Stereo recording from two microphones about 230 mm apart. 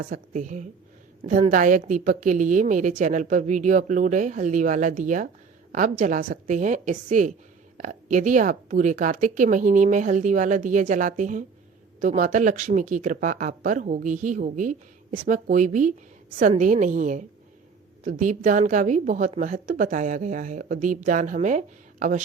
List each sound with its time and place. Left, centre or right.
0.0 s a woman's voice: right